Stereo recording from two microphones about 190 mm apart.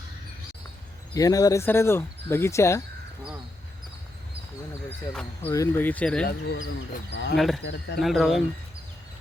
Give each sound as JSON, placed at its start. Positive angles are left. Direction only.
{"t": 1.1, "sound": "speech", "side_deg": 20}
{"t": 5.5, "sound": "speech", "side_deg": 10}
{"t": 6.2, "sound": "speech", "side_deg": 65}
{"t": 7.3, "sound": "speech", "side_deg": 0}
{"t": 7.6, "sound": "speech", "side_deg": 65}
{"t": 7.9, "sound": "speech", "side_deg": 0}